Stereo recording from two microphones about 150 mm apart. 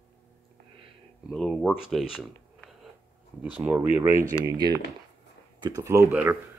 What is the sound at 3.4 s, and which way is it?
Speech, 10° right (ahead or behind).